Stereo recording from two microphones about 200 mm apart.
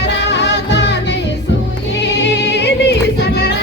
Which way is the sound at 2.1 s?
60° left (ahead or behind).